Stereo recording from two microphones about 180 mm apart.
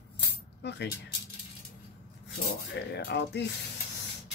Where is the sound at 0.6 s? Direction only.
70° left (ahead or behind).